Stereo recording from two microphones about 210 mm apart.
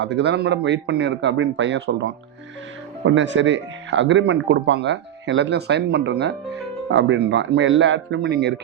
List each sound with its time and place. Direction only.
0.0 s speech: 55° right (ahead or behind)
3.1 s speech: 60° right (ahead or behind)